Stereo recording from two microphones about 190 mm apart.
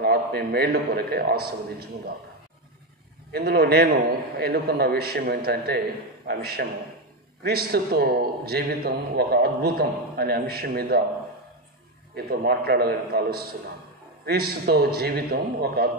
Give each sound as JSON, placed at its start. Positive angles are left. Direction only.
{"t": 0.0, "sound": "a man's voice", "side_deg": -55}
{"t": 3.3, "sound": "a man's voice", "side_deg": -55}
{"t": 12.2, "sound": "a man's voice", "side_deg": -55}